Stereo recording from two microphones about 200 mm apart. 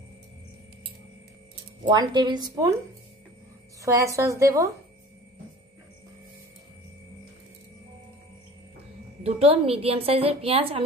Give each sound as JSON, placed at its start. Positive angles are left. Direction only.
{"t": 1.9, "sound": "a woman's voice", "side_deg": -20}
{"t": 3.8, "sound": "a woman's voice", "side_deg": -15}
{"t": 9.2, "sound": "a woman's voice", "side_deg": -30}